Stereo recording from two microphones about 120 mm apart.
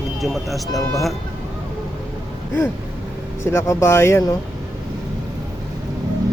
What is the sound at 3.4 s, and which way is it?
Speech, 20° left (ahead or behind).